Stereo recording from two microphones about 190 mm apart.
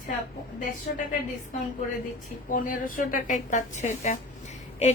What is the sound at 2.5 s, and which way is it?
A woman's voice, 45° left (ahead or behind).